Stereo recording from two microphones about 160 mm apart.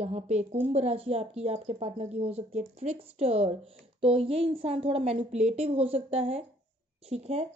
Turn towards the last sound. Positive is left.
turn(degrees=-40)  # may be behind; listen again after turning